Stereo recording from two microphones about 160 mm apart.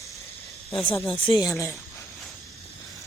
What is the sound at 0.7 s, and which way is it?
Speech, 35° left (ahead or behind).